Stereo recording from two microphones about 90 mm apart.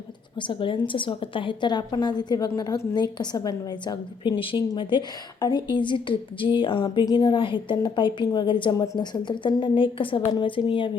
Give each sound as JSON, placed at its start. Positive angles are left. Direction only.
{"t": 0.3, "sound": "a woman's voice", "side_deg": 65}
{"t": 5.4, "sound": "a woman's voice", "side_deg": 55}
{"t": 8.7, "sound": "speech", "side_deg": 35}
{"t": 9.0, "sound": "a woman's voice", "side_deg": 60}